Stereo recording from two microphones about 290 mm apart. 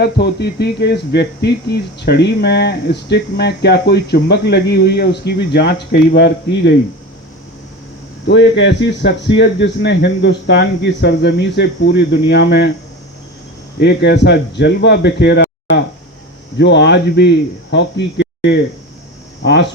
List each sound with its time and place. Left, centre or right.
0.0 s speech: left
8.3 s speech: left
13.7 s speech: left